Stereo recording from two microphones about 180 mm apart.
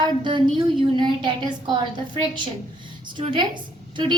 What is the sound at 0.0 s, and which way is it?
A woman's voice, 25° right (ahead or behind).